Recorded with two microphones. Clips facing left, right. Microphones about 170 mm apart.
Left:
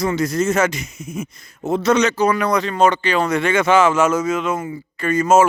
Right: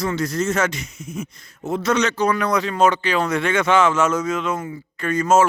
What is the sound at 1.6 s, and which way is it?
Speech, 20° left (ahead or behind).